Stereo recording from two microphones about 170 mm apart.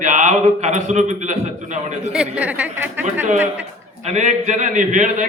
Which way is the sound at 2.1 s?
5° right (ahead or behind).